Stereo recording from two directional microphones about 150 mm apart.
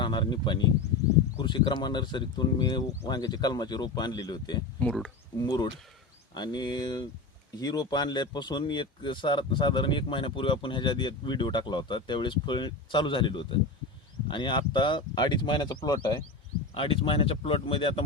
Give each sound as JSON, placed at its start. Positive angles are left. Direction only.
{"t": 0.0, "sound": "speech", "side_deg": 30}
{"t": 4.8, "sound": "speech", "side_deg": 5}
{"t": 5.4, "sound": "speech", "side_deg": 30}